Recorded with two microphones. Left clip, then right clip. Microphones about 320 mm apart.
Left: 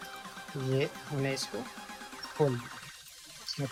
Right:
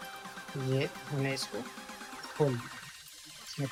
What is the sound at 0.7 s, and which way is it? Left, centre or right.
Speech, left.